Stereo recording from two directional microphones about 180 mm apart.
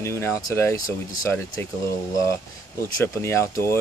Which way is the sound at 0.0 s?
15° left (ahead or behind).